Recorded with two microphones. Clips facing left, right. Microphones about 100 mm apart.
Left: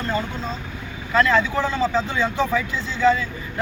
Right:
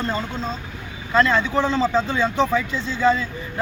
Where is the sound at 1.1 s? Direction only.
25° right (ahead or behind).